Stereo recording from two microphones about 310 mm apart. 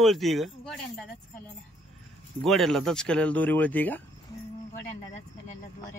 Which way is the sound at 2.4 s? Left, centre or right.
Centre.